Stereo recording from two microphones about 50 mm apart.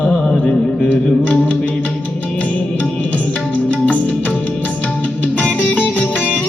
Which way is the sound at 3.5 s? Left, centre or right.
Left.